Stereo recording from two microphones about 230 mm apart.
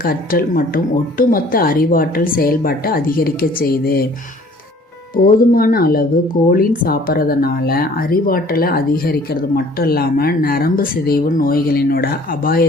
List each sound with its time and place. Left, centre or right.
0.0 s speech: left
5.1 s speech: left